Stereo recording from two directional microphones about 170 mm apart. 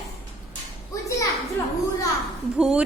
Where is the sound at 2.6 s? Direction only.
5° right (ahead or behind).